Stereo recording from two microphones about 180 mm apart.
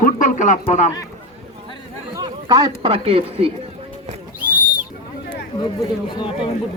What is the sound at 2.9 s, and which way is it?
Speech, 30° right (ahead or behind).